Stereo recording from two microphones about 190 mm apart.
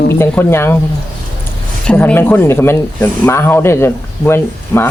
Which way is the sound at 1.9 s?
5° left (ahead or behind).